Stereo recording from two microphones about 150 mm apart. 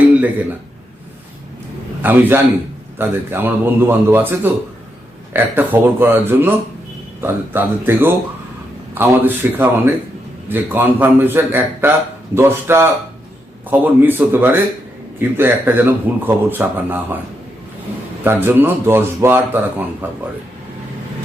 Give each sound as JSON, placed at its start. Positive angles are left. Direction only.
{"t": 2.0, "sound": "a man's voice", "side_deg": -15}
{"t": 18.2, "sound": "a man's voice", "side_deg": -15}